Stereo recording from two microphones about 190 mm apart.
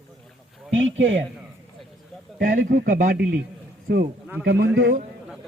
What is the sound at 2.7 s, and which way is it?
Speech, 45° right (ahead or behind).